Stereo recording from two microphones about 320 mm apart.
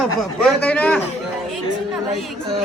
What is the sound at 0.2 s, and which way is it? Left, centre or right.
Speech, centre.